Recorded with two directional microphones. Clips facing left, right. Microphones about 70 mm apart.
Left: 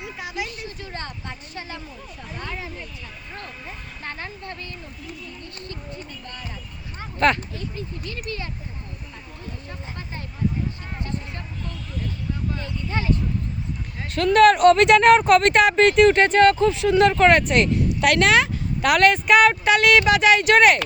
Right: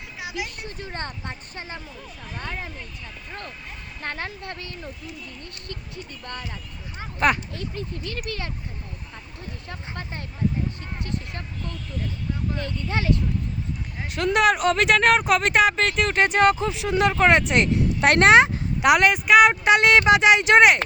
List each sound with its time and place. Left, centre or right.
0.0 s vehicle: centre
0.9 s a sound: right
4.0 s speech: right
7.0 s a sound: centre
7.5 s speech: right
9.6 s speech: right
12.5 s speech: right
14.0 s speech: centre
14.5 s speech: centre
16.2 s speech: centre
18.0 s speech: right; by 19.5 s centre
19.6 s speech: right